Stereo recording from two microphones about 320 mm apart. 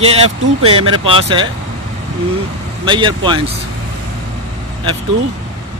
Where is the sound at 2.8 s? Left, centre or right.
Centre.